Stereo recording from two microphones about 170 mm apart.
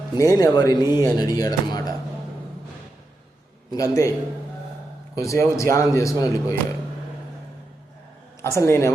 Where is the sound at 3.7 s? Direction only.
20° left (ahead or behind).